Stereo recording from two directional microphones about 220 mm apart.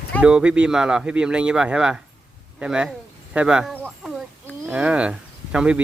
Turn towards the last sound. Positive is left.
turn(degrees=-5)  # may be behind; listen again after turning